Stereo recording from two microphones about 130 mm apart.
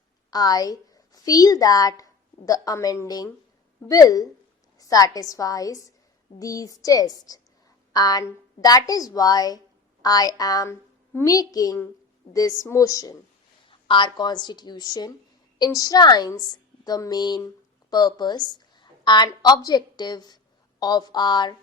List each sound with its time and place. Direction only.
0.3 s a woman's voice: 30° left (ahead or behind)
13.7 s a woman's voice: 40° left (ahead or behind)